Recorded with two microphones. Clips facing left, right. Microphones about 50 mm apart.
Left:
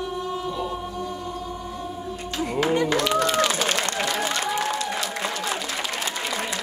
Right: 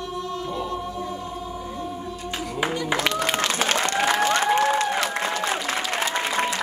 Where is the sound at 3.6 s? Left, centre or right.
Right.